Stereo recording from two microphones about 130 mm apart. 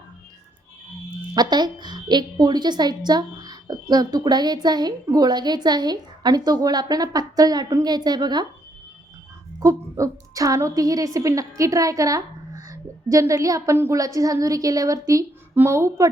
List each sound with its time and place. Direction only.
1.3 s a woman's voice: 35° right (ahead or behind)
9.6 s a woman's voice: 25° right (ahead or behind)